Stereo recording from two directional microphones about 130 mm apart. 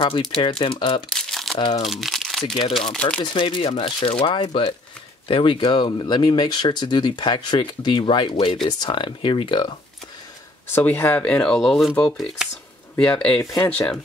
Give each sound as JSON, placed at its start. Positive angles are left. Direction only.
{"t": 0.0, "sound": "speech", "side_deg": 40}
{"t": 1.0, "sound": "crumpling", "side_deg": 0}
{"t": 1.9, "sound": "speech", "side_deg": 0}
{"t": 3.2, "sound": "speech", "side_deg": 40}
{"t": 10.7, "sound": "speech", "side_deg": 15}